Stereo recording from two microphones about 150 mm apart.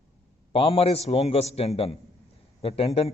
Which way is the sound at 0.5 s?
40° left (ahead or behind).